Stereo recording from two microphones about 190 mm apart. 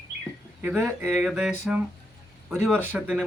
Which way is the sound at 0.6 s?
10° right (ahead or behind).